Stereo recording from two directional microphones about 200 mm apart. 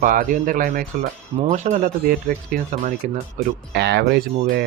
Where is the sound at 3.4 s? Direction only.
55° right (ahead or behind).